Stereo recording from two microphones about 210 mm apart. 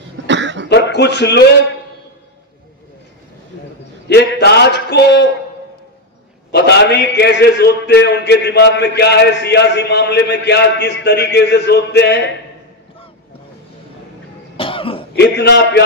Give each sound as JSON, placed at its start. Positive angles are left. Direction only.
{"t": 0.3, "sound": "cough", "side_deg": -60}
{"t": 0.7, "sound": "a sound", "side_deg": 55}
{"t": 4.1, "sound": "a sound", "side_deg": 50}
{"t": 6.5, "sound": "a man's voice", "side_deg": 55}
{"t": 14.6, "sound": "throat clearing", "side_deg": 25}
{"t": 15.1, "sound": "a man's voice", "side_deg": 55}